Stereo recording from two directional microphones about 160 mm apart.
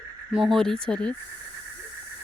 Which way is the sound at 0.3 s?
Centre (ahead or behind).